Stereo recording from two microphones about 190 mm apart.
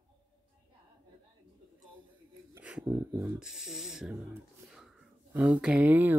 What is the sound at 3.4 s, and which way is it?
Speech, 5° right (ahead or behind).